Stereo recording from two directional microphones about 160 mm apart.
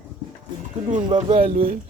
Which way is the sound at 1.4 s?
35° right (ahead or behind).